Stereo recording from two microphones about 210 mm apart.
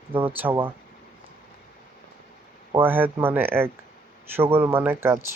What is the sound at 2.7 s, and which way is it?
Speech, 10° right (ahead or behind).